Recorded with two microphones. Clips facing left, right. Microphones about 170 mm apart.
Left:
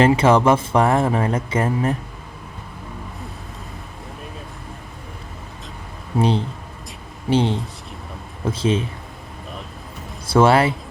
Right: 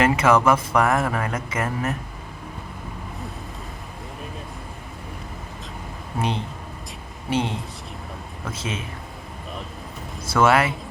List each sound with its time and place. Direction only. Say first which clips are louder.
0.0 s speech: left 3 dB; 30° left (ahead or behind)
7.3 s speech: left 6 dB; 30° left (ahead or behind)
10.2 s speech: left 4 dB; 30° left (ahead or behind)